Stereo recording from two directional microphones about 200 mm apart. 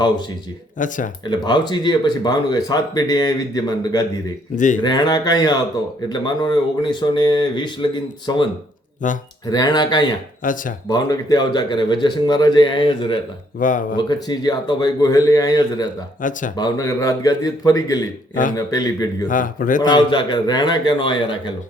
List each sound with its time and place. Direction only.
0.8 s speech: 40° left (ahead or behind)
1.3 s speech: 20° left (ahead or behind)
4.5 s speech: 40° left (ahead or behind)
4.8 s speech: 20° left (ahead or behind)
9.0 s speech: 40° left (ahead or behind)
9.5 s speech: 20° left (ahead or behind)
10.4 s speech: 40° left (ahead or behind)
10.8 s speech: 20° left (ahead or behind)
13.6 s speech: 40° left (ahead or behind)
13.9 s speech: 20° left (ahead or behind)
16.2 s speech: 40° left (ahead or behind)
16.6 s a man's voice: 20° left (ahead or behind)
19.3 s a man's voice: 40° left (ahead or behind)
19.9 s speech: 20° left (ahead or behind)